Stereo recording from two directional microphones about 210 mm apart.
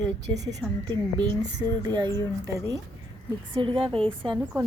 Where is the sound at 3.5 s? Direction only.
25° right (ahead or behind).